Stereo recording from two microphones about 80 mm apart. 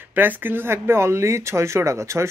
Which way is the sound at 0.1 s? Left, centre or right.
Right.